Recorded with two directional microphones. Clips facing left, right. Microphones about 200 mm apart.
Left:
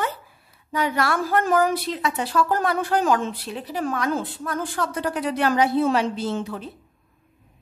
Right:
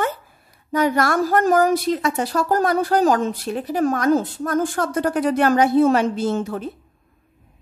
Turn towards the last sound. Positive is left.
turn(degrees=-45)  # may be behind; listen again after turning